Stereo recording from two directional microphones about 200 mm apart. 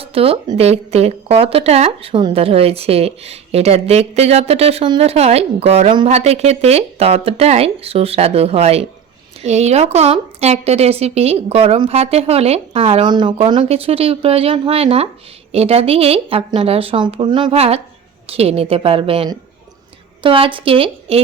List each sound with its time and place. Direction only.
0.0 s speech: 30° right (ahead or behind)